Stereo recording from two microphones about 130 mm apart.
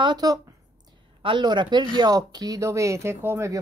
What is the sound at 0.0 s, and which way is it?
Speech, 30° right (ahead or behind).